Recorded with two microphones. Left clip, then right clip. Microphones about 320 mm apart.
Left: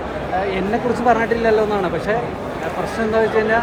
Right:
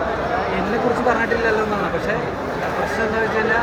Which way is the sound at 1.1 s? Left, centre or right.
Left.